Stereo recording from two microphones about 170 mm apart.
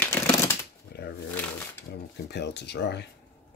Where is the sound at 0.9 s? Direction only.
70° left (ahead or behind).